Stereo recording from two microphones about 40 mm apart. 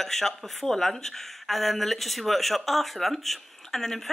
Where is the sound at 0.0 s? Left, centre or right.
Centre.